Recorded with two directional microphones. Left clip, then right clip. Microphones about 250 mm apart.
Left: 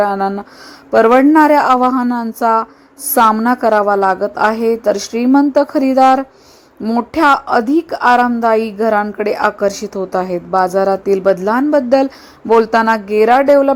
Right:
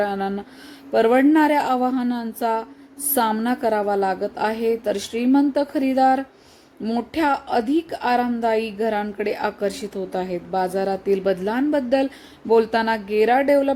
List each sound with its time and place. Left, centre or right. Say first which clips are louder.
0.9 s a woman's voice: left 8 dB; centre